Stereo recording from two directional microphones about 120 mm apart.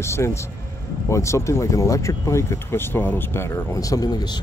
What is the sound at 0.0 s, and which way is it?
Speech, 25° left (ahead or behind).